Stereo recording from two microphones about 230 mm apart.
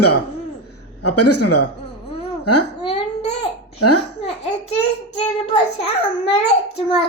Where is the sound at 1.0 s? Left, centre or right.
Left.